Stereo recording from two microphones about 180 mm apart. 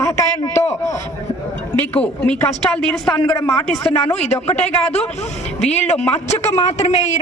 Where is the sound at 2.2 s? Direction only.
5° left (ahead or behind).